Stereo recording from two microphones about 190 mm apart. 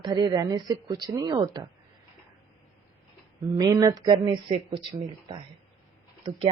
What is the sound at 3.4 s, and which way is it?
A woman's voice, 20° right (ahead or behind).